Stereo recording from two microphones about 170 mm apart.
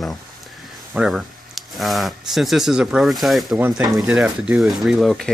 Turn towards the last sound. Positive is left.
turn(degrees=0)  # may be behind; listen again after turning